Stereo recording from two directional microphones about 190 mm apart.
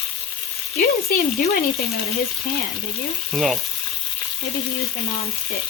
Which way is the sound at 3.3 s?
Centre (ahead or behind).